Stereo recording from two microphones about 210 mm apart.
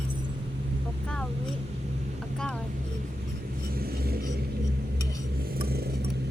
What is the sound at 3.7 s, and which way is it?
Vehicle, 45° right (ahead or behind).